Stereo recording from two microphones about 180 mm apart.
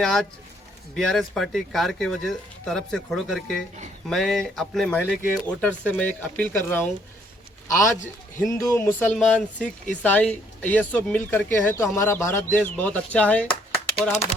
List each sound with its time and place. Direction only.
0.0 s speech: centre (ahead or behind)
7.9 s a man's voice: 45° left (ahead or behind)
8.4 s speech: 15° left (ahead or behind)